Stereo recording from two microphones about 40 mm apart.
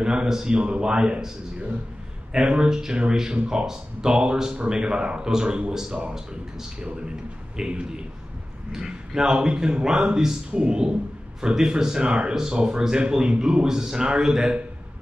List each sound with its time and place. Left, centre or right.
0.0 s speech: right
2.3 s speech: right
7.6 s speech: centre